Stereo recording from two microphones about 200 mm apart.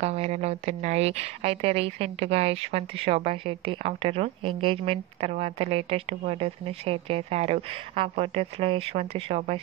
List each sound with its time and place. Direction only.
0.0 s a woman's voice: 30° right (ahead or behind)